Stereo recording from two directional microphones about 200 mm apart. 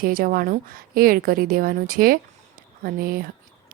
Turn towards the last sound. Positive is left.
turn(degrees=-45)  # may be behind; listen again after turning